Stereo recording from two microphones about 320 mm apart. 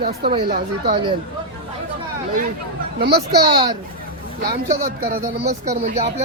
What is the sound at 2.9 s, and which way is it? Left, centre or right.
Speech, right.